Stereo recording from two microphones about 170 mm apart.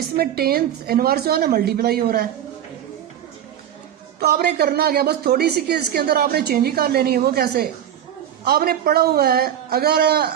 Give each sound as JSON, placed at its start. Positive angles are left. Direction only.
{"t": 0.2, "sound": "a woman's voice", "side_deg": -65}
{"t": 4.2, "sound": "a woman's voice", "side_deg": -70}